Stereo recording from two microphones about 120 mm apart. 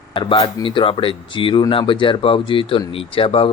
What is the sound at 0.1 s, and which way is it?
Speech, 45° left (ahead or behind).